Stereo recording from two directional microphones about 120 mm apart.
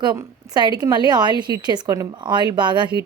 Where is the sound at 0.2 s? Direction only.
35° right (ahead or behind).